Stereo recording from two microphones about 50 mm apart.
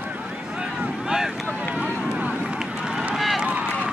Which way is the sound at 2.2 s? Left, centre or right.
Right.